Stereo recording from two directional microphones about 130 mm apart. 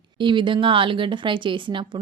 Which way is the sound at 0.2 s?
40° right (ahead or behind).